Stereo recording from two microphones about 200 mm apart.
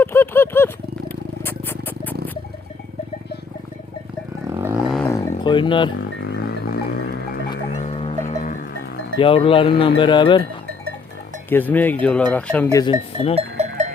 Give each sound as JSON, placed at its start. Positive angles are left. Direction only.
{"t": 0.0, "sound": "a sound", "side_deg": 10}
{"t": 4.4, "sound": "a sound", "side_deg": -10}
{"t": 5.4, "sound": "speech", "side_deg": 25}
{"t": 6.3, "sound": "music", "side_deg": 50}
{"t": 7.8, "sound": "music", "side_deg": 30}
{"t": 9.1, "sound": "speech", "side_deg": 25}
{"t": 11.4, "sound": "speech", "side_deg": 10}
{"t": 12.7, "sound": "speech", "side_deg": 25}
{"t": 13.3, "sound": "sheep", "side_deg": -35}